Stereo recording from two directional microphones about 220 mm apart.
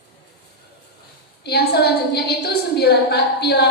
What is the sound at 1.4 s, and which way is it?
A woman's voice, 50° left (ahead or behind).